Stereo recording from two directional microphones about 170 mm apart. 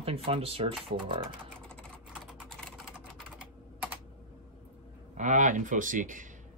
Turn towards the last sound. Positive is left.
turn(degrees=-50)  # may be behind; listen again after turning